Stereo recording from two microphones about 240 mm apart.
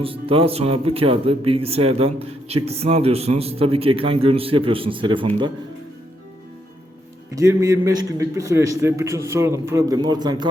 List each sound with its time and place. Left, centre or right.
0.0 s speech: right
7.3 s a man's voice: centre